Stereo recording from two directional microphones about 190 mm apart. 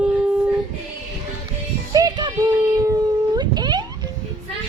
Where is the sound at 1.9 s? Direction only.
20° right (ahead or behind).